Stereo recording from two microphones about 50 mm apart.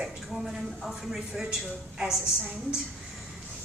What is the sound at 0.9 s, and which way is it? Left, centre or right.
A woman's voice, centre.